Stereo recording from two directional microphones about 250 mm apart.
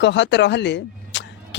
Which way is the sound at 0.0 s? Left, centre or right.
Left.